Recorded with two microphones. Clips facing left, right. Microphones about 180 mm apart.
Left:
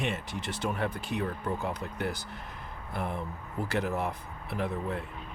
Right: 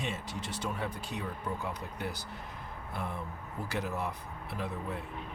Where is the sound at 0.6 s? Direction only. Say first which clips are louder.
Left 5 dB; 60° left (ahead or behind).